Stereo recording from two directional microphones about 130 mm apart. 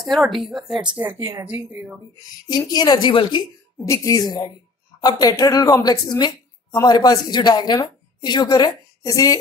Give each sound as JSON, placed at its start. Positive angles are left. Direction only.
{"t": 0.1, "sound": "speech", "side_deg": 0}
{"t": 1.2, "sound": "speech", "side_deg": -15}
{"t": 2.4, "sound": "a woman's voice", "side_deg": 30}
{"t": 3.8, "sound": "a woman's voice", "side_deg": 25}